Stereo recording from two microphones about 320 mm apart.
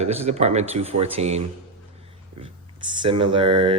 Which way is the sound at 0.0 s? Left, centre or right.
Centre.